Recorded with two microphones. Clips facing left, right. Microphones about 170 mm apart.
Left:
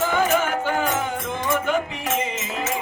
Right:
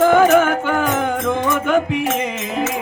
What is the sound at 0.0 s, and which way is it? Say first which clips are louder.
Music: right 9 dB; 55° right (ahead or behind).